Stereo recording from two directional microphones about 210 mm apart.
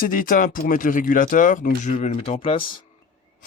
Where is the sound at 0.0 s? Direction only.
40° left (ahead or behind); by 2.7 s 25° left (ahead or behind).